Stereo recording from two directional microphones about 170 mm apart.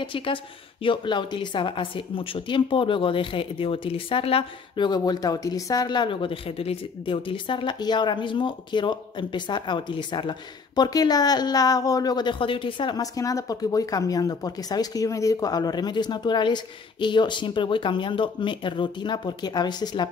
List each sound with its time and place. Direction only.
0.0 s a woman's voice: 30° left (ahead or behind)